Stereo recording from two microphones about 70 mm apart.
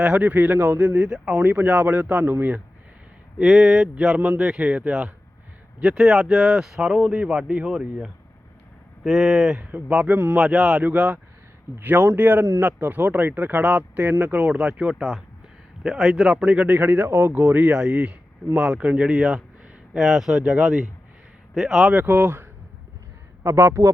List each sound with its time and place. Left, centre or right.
0.0 s speech: centre
1.4 s speech: right
3.4 s speech: centre
10.1 s speech: right
10.3 s speech: centre
21.9 s speech: right
23.4 s speech: right